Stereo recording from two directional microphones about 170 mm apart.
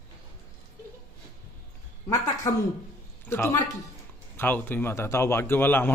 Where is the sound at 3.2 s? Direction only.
15° left (ahead or behind).